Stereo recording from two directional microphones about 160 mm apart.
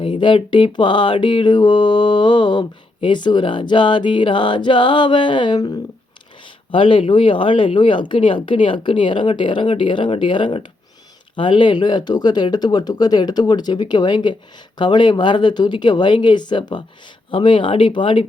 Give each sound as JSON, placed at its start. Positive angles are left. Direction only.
{"t": 0.0, "sound": "mantra", "side_deg": 30}
{"t": 6.7, "sound": "speech", "side_deg": 35}
{"t": 11.3, "sound": "mantra", "side_deg": 30}
{"t": 17.3, "sound": "speech", "side_deg": 30}